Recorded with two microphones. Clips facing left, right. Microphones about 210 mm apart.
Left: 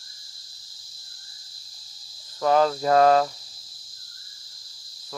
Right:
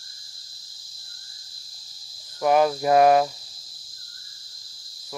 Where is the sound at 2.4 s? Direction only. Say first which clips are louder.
Right 1 dB; 15° right (ahead or behind).